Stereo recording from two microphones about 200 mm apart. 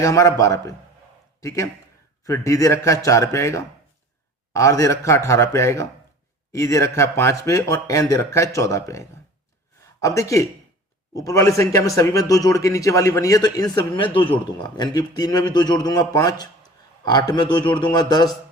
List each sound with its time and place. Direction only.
0.0 s a man's voice: 15° left (ahead or behind)